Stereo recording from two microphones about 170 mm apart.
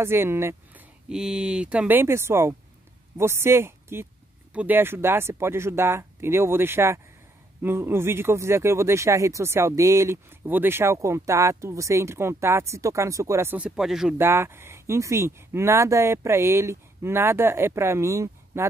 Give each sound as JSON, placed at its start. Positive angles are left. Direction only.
{"t": 0.0, "sound": "speech", "side_deg": -15}
{"t": 1.0, "sound": "speech", "side_deg": -5}
{"t": 14.1, "sound": "speech", "side_deg": -15}